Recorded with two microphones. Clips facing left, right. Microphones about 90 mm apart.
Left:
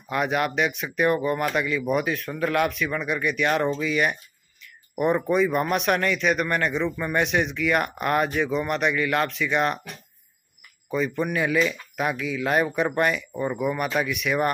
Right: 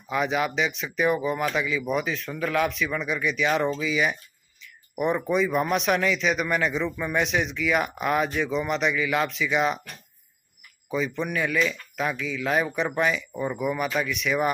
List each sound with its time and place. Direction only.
0.1 s speech: centre (ahead or behind)
10.9 s speech: centre (ahead or behind)